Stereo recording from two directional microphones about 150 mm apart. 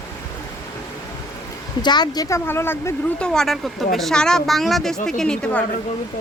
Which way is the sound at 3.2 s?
5° left (ahead or behind).